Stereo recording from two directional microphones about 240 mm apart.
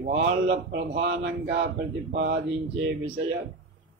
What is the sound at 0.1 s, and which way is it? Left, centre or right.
Speech, right.